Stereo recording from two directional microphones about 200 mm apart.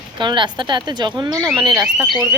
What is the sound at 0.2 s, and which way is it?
A woman's voice, 25° right (ahead or behind).